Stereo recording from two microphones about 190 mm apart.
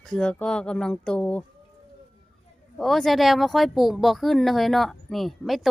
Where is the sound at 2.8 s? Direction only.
Centre (ahead or behind).